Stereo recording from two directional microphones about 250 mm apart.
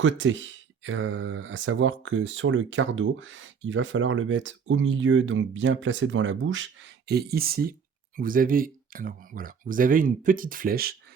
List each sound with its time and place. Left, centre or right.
0.0 s speech: right